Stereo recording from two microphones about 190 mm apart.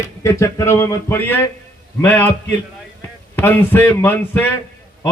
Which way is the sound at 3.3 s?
10° left (ahead or behind).